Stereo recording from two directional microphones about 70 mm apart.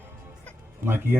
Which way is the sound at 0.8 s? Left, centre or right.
Right.